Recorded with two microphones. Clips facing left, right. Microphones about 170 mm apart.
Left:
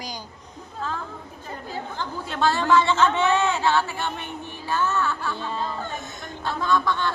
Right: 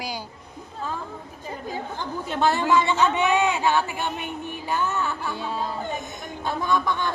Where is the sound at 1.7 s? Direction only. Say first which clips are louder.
Right 1 dB; 15° right (ahead or behind).